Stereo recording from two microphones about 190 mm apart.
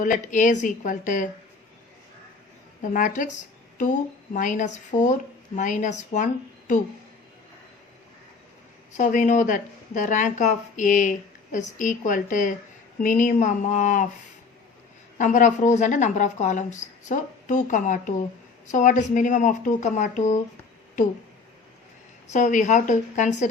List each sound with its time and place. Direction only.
0.0 s a woman's voice: 40° left (ahead or behind)
2.8 s a woman's voice: 45° left (ahead or behind)
4.4 s a woman's voice: 40° left (ahead or behind)
8.9 s a woman's voice: 40° left (ahead or behind)
15.2 s a woman's voice: 40° left (ahead or behind)
22.3 s a woman's voice: 40° left (ahead or behind)